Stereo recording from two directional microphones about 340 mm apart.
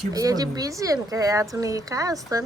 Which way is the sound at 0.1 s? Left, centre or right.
Centre.